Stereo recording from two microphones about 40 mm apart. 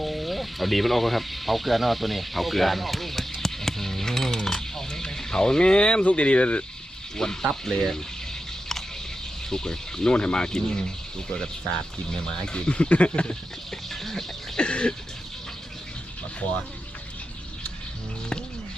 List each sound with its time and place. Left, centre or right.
0.0 s a sound: centre; by 6.7 s left
7.2 s speech: centre
7.6 s boiling: centre
9.5 s speech: centre
12.6 s speech: left
13.7 s a sound: centre
14.5 s cough: left